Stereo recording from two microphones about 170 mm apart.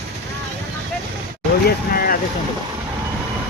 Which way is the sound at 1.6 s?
55° left (ahead or behind).